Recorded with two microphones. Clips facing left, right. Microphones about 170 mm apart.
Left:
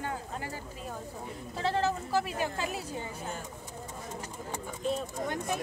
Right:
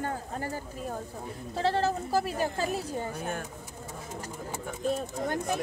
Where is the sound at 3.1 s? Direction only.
65° right (ahead or behind).